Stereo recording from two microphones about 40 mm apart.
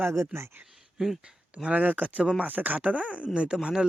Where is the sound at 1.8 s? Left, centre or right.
Right.